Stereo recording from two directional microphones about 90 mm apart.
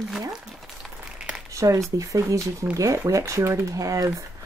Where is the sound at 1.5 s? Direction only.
35° right (ahead or behind).